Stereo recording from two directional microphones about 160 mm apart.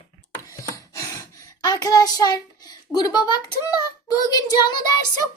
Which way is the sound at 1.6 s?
25° left (ahead or behind).